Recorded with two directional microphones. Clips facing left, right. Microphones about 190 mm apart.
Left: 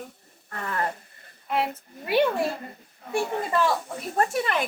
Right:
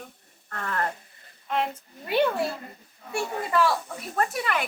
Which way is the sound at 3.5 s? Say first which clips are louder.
Right 3 dB; 20° left (ahead or behind).